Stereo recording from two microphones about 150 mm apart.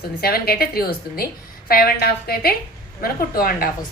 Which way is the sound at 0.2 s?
90° left.